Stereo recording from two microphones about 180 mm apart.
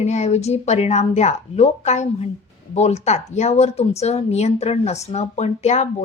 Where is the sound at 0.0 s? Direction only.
40° left (ahead or behind).